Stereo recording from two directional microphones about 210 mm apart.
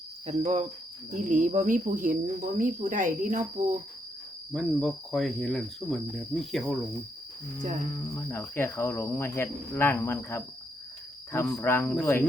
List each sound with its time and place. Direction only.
0.3 s speech: 35° right (ahead or behind)
4.5 s speech: centre (ahead or behind)
7.9 s speech: 10° left (ahead or behind)